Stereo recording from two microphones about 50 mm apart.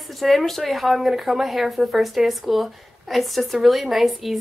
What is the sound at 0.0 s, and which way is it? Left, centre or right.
A woman's voice, centre.